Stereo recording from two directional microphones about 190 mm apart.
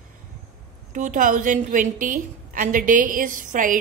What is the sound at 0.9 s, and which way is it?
A woman's voice, 45° right (ahead or behind).